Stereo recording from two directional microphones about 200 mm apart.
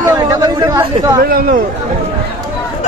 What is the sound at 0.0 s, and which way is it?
Chatter, 20° right (ahead or behind).